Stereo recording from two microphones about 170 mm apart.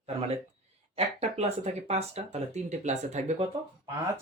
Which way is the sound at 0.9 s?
40° right (ahead or behind).